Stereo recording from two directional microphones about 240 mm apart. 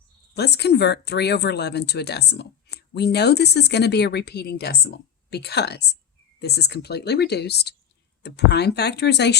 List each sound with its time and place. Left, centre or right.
0.3 s speech: left